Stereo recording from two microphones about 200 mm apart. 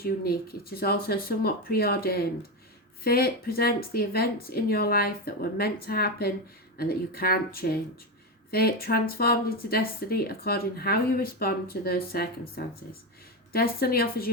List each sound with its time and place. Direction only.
0.0 s speech: 50° left (ahead or behind)